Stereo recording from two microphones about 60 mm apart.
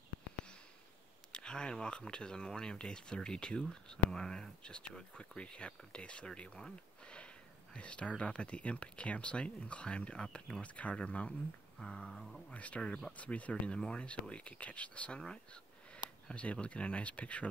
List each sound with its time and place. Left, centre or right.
1.3 s speech: centre
12.1 s speech: centre
12.4 s speech: left